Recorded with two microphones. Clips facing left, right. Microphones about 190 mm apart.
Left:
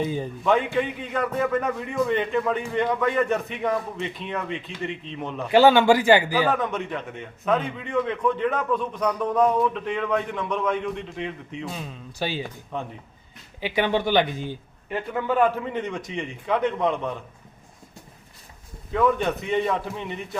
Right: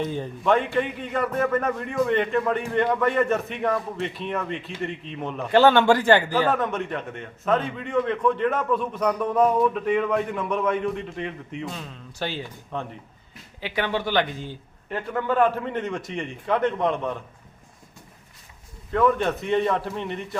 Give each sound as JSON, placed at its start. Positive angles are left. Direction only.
{"t": 0.0, "sound": "a man's voice", "side_deg": 5}
{"t": 11.7, "sound": "speech", "side_deg": 10}
{"t": 15.3, "sound": "a man's voice", "side_deg": 5}
{"t": 18.9, "sound": "a man's voice", "side_deg": 0}